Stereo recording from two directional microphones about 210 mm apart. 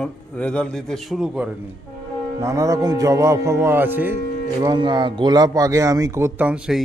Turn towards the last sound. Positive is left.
turn(degrees=-5)  # may be behind; listen again after turning